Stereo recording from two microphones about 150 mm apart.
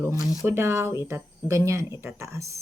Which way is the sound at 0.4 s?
15° right (ahead or behind).